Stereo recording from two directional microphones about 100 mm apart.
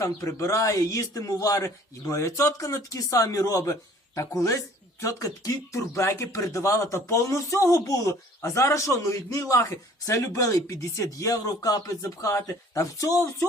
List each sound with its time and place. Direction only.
0.0 s speech: 30° left (ahead or behind)